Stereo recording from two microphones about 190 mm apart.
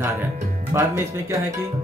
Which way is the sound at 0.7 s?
15° right (ahead or behind).